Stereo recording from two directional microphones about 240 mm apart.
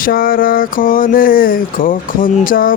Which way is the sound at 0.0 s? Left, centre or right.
Left.